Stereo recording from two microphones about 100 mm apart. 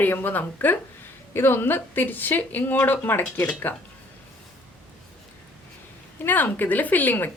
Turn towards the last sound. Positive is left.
turn(degrees=15)  # may be behind; listen again after turning